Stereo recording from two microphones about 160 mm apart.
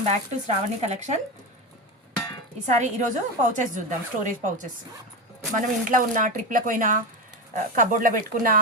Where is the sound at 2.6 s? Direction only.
50° right (ahead or behind).